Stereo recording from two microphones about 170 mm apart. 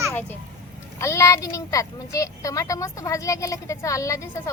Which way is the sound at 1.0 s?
20° left (ahead or behind).